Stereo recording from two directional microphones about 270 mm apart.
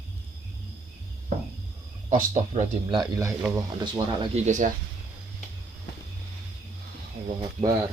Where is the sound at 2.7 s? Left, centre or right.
Centre.